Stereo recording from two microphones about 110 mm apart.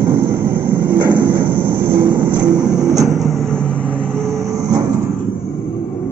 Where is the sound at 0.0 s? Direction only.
20° right (ahead or behind).